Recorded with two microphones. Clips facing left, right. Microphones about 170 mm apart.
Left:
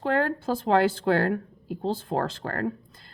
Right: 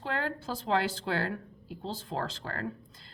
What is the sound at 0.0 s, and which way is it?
Speech, 50° left (ahead or behind).